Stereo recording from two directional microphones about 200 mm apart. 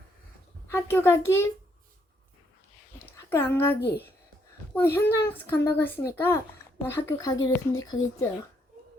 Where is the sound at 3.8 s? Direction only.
55° left (ahead or behind).